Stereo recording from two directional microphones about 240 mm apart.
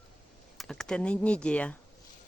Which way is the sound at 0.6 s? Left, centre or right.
Centre.